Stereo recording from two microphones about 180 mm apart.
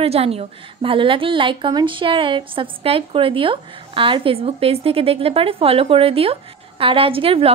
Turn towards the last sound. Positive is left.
turn(degrees=-30)  # may be behind; listen again after turning